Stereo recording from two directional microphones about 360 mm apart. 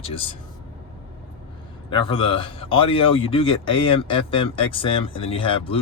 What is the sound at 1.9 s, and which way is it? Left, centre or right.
Speech, centre.